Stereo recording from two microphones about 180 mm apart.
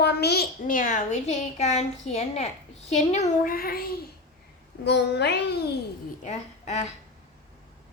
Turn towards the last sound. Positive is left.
turn(degrees=40)  # may be behind; listen again after turning